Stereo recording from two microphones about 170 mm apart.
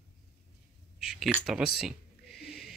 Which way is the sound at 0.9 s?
5° right (ahead or behind).